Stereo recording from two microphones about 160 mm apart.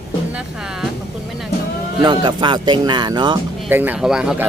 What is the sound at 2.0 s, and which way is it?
Speech, 25° right (ahead or behind).